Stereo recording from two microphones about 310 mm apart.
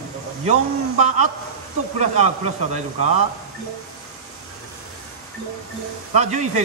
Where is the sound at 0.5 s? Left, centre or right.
Right.